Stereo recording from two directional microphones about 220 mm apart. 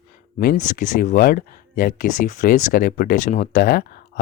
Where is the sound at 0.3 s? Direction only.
40° left (ahead or behind).